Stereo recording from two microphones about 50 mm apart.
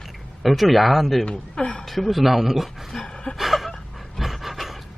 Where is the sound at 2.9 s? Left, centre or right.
Centre.